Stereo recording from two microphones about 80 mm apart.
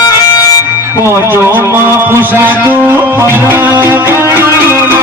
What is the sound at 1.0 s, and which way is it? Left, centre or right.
A man's voice, right.